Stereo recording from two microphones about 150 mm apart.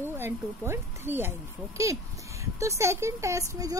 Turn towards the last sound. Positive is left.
turn(degrees=-25)  # may be behind; listen again after turning